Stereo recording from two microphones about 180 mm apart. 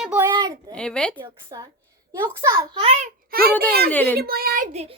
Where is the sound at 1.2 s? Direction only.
20° right (ahead or behind).